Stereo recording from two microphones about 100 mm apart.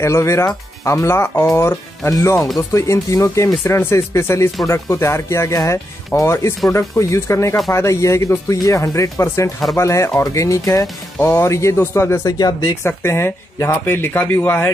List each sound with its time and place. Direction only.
0.0 s speech: 30° left (ahead or behind)
12.8 s speech: 25° left (ahead or behind)